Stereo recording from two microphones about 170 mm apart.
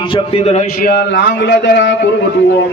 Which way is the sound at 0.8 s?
85° left.